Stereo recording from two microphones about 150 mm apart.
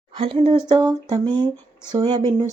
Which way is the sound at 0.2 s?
40° right (ahead or behind).